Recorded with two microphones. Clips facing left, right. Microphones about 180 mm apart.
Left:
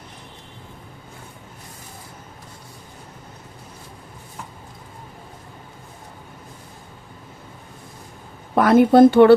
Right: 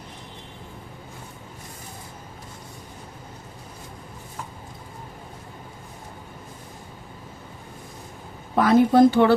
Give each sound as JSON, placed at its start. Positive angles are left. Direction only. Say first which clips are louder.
{"t": 8.5, "sound": "speech", "louder": "left 4 dB", "side_deg": 65}